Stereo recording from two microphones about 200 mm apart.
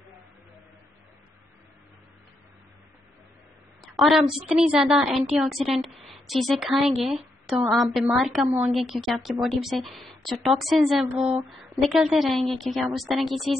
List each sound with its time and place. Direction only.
3.8 s a woman's voice: centre (ahead or behind)